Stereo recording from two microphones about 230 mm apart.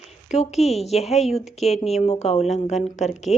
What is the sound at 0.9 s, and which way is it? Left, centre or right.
Speech, left.